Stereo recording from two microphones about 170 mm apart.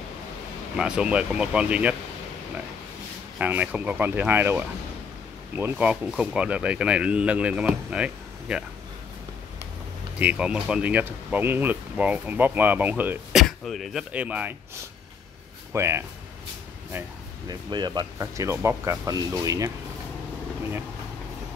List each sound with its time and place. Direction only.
0.7 s speech: 5° right (ahead or behind)
3.3 s speech: 10° right (ahead or behind)
10.1 s speech: 5° right (ahead or behind)
13.4 s speech: centre (ahead or behind)
15.7 s speech: 15° right (ahead or behind)
17.5 s speech: 25° right (ahead or behind)